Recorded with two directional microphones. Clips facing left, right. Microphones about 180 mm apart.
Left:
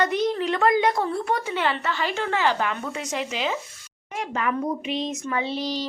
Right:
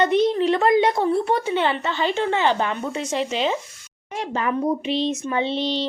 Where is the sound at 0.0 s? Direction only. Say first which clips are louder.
Right 5 dB; 25° right (ahead or behind).